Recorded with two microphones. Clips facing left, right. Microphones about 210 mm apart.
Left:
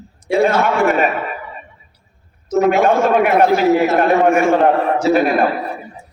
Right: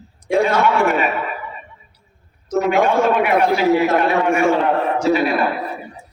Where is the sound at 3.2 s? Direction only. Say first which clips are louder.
Left 3 dB; 45° left (ahead or behind).